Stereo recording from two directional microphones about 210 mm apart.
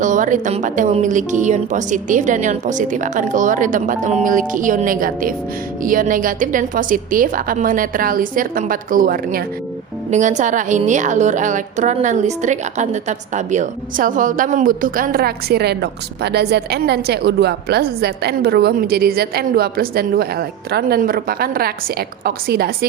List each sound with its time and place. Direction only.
0.0 s a woman's voice: 35° right (ahead or behind)